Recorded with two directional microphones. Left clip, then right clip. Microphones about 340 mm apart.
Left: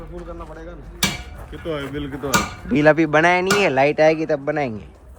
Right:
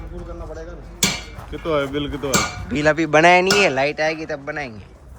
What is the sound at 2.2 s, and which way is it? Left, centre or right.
Cutlery, centre.